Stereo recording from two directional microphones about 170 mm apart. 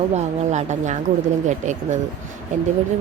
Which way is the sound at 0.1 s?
45° right (ahead or behind).